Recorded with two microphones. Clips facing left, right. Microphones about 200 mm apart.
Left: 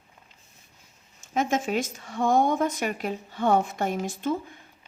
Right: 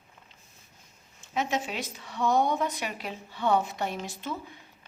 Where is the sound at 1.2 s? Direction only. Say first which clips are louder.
Left 4 dB; 45° left (ahead or behind).